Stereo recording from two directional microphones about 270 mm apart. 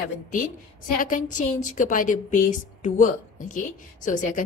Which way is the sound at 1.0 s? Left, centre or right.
Left.